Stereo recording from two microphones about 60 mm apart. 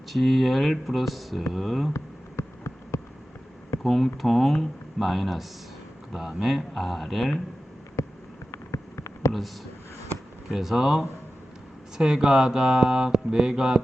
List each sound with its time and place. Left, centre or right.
0.1 s speech: centre
1.9 s insect: left
3.8 s speech: centre
8.0 s a sound: left
10.5 s speech: centre
11.9 s mantra: centre